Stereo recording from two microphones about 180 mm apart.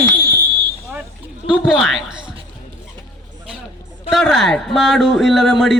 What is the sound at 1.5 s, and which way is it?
Speech, 5° right (ahead or behind).